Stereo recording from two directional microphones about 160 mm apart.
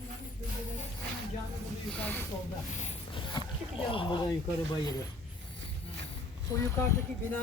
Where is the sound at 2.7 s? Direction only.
45° left (ahead or behind).